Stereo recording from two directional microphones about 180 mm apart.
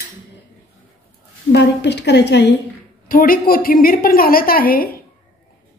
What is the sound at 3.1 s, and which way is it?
A woman's voice, 55° left (ahead or behind).